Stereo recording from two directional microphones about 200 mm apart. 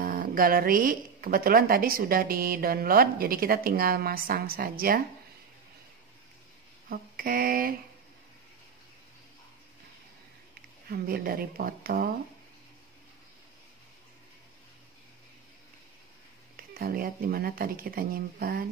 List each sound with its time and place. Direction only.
0.0 s a woman's voice: 45° right (ahead or behind)
6.9 s a sound: 45° right (ahead or behind)
10.9 s a woman's voice: 45° right (ahead or behind)
16.5 s a woman's voice: 45° right (ahead or behind)